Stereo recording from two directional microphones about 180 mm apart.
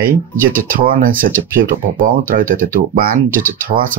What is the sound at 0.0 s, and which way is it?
Speech, 50° right (ahead or behind).